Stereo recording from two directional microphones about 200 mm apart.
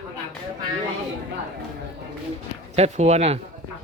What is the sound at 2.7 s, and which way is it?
Speech, 35° right (ahead or behind).